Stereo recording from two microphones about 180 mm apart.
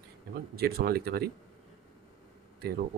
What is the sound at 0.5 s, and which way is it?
Speech, 60° right (ahead or behind).